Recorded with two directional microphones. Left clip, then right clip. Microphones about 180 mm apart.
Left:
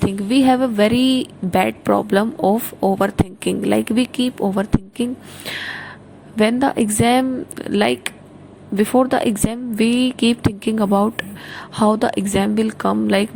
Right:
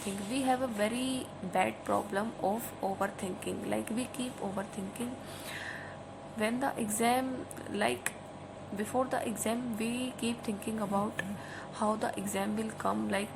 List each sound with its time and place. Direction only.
0.3 s speech: 50° left (ahead or behind)
5.5 s gasp: 50° left (ahead or behind)
6.4 s speech: 50° left (ahead or behind)